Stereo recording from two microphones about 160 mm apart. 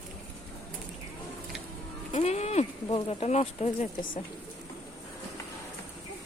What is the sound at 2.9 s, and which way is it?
Speech, 40° left (ahead or behind).